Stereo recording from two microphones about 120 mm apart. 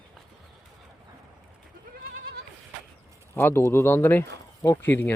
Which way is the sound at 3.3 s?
20° left (ahead or behind).